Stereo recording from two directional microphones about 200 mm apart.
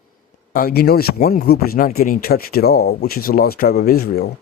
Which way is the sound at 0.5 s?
50° left (ahead or behind).